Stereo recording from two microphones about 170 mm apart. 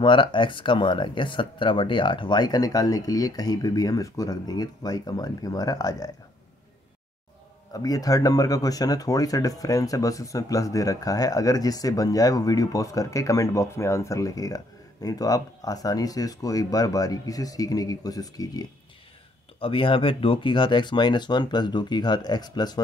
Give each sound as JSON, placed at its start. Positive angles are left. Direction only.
{"t": 0.0, "sound": "speech", "side_deg": 30}
{"t": 7.7, "sound": "speech", "side_deg": 20}